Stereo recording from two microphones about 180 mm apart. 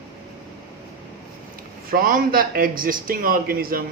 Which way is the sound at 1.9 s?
50° right (ahead or behind).